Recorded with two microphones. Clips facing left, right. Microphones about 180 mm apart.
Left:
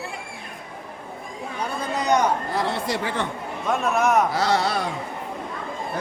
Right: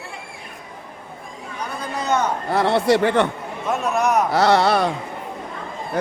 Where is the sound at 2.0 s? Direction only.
15° left (ahead or behind).